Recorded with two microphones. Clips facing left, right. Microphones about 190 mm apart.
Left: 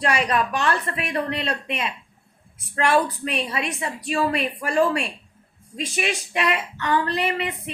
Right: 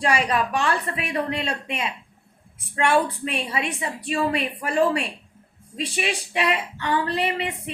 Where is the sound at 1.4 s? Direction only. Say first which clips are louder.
Left 1 dB; 35° left (ahead or behind).